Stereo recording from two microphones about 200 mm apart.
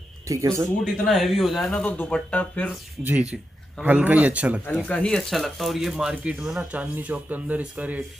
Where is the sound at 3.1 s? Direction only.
5° right (ahead or behind).